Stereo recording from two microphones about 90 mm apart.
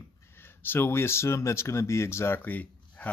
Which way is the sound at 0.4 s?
25° left (ahead or behind).